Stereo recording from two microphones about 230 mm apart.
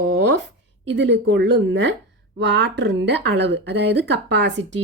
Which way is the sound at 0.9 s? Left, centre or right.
Right.